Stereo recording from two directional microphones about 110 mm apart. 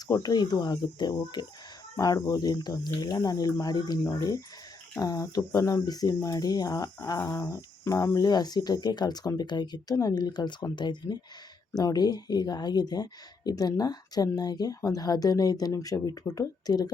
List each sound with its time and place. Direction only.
0.1 s speech: 35° left (ahead or behind)